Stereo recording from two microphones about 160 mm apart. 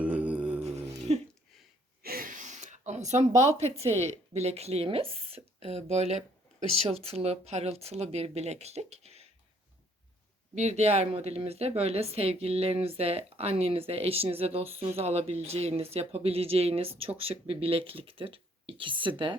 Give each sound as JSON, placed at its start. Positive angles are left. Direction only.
{"t": 0.0, "sound": "music", "side_deg": -10}
{"t": 0.6, "sound": "music", "side_deg": -45}
{"t": 2.0, "sound": "a sound", "side_deg": -60}
{"t": 3.9, "sound": "a woman's voice", "side_deg": -40}
{"t": 10.5, "sound": "a woman's voice", "side_deg": -45}